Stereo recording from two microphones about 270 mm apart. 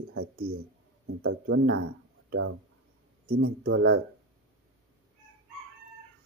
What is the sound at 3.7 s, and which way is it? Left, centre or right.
Speech, right.